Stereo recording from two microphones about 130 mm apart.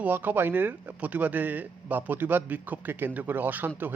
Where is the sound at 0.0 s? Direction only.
15° right (ahead or behind).